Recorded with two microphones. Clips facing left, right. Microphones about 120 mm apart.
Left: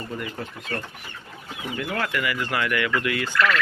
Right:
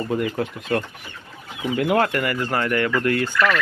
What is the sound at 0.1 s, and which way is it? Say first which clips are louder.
Speech: right 9 dB; 65° right (ahead or behind).